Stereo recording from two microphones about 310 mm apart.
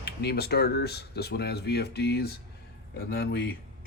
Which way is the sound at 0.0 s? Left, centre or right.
Left.